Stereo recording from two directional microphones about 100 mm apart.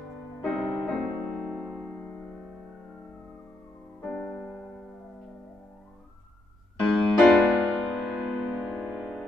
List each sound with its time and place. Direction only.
0.4 s music: centre (ahead or behind)
4.0 s music: 10° left (ahead or behind)
6.8 s music: 5° left (ahead or behind)